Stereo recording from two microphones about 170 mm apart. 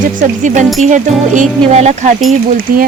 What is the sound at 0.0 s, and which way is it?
Speech, 50° right (ahead or behind).